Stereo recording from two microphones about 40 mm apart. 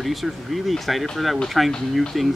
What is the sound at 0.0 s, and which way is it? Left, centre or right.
Speech, centre.